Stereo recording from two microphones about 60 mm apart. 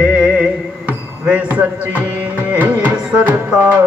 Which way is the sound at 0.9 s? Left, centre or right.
Right.